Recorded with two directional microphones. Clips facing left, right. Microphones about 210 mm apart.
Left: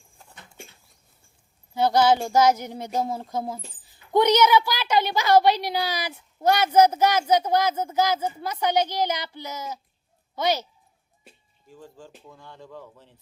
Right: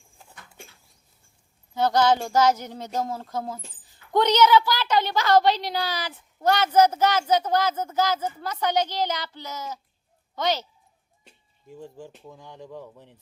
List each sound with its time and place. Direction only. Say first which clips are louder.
0.3 s a sound: left 2 dB; 25° left (ahead or behind)
1.7 s a woman's voice: left 1 dB; 10° left (ahead or behind)
11.7 s speech: right 4 dB; 20° right (ahead or behind)